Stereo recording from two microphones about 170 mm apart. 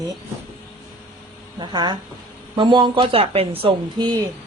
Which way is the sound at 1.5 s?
25° right (ahead or behind).